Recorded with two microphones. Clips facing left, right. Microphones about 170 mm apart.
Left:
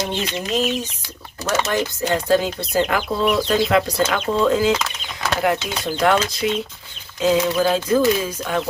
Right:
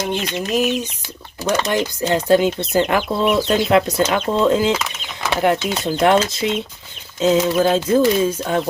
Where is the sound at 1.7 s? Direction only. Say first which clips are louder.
Right 2 dB; 20° right (ahead or behind).